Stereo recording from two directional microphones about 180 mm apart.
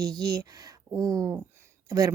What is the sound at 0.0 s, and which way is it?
A woman's voice, 20° right (ahead or behind).